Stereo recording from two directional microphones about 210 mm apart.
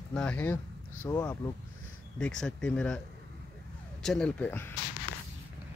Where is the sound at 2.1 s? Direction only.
5° left (ahead or behind).